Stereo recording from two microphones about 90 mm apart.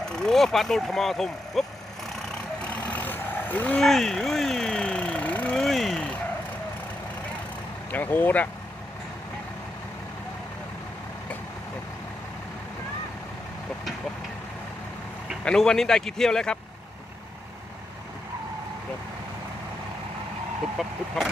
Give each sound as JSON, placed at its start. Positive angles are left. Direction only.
{"t": 0.0, "sound": "speech", "side_deg": 5}
{"t": 2.6, "sound": "vehicle", "side_deg": 15}
{"t": 3.8, "sound": "a sound", "side_deg": 0}
{"t": 5.5, "sound": "vehicle", "side_deg": 5}
{"t": 7.9, "sound": "speech", "side_deg": 20}
{"t": 15.4, "sound": "a man's voice", "side_deg": 5}
{"t": 20.8, "sound": "speech", "side_deg": -5}